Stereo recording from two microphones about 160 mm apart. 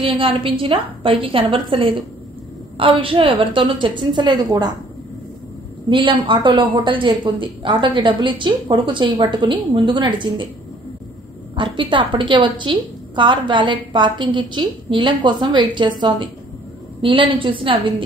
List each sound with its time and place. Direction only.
0.0 s a woman's voice: 35° right (ahead or behind)
5.9 s a woman's voice: 30° right (ahead or behind)
11.5 s a woman's voice: 30° right (ahead or behind)